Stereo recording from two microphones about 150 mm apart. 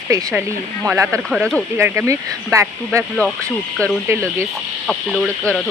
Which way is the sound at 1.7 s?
15° right (ahead or behind).